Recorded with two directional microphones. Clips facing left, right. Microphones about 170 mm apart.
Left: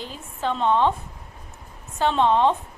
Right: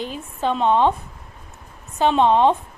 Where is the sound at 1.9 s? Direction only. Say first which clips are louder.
Right 3 dB; 15° right (ahead or behind).